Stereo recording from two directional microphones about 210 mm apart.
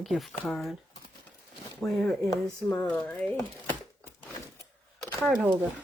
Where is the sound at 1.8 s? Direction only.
Centre (ahead or behind).